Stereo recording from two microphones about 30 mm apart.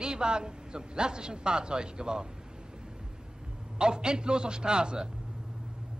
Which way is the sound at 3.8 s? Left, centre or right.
Right.